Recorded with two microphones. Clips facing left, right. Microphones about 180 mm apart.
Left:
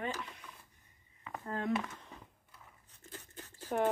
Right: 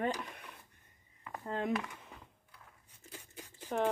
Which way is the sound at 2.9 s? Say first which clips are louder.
Left 1 dB; 10° right (ahead or behind).